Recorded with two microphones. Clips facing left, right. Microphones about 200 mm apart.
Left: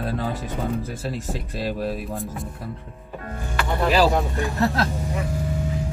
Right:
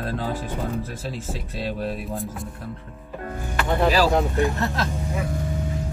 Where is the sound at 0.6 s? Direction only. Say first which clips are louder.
Left 2 dB; centre (ahead or behind).